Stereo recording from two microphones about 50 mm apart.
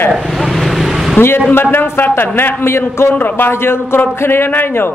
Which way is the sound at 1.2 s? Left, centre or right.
Left.